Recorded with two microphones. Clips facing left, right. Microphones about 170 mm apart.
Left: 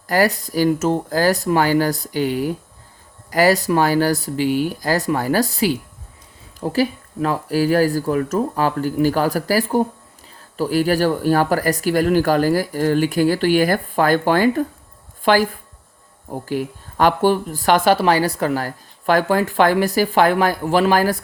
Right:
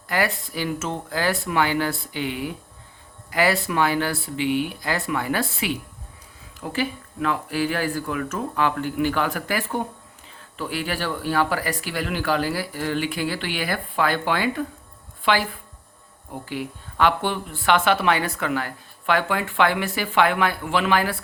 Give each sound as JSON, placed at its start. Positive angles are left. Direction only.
{"t": 0.1, "sound": "speech", "side_deg": 40}